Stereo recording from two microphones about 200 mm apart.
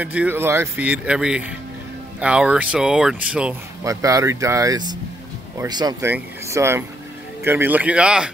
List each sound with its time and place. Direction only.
0.0 s speech: 5° right (ahead or behind)